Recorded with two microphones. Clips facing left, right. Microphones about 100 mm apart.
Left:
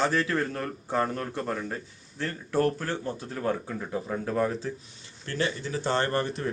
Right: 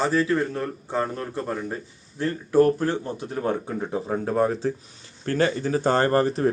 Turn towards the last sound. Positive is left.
turn(degrees=-35)  # may be behind; listen again after turning